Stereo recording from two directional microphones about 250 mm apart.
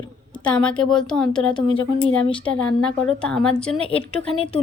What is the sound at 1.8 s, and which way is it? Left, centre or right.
Speech, left.